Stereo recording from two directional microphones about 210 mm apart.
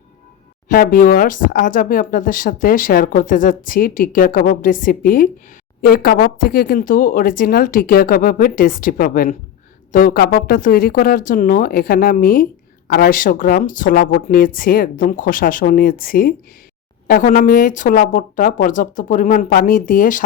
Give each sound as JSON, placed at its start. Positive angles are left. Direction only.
{"t": 0.7, "sound": "speech", "side_deg": 45}